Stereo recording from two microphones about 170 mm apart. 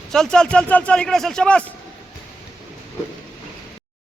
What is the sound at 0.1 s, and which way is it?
Speech, 5° left (ahead or behind).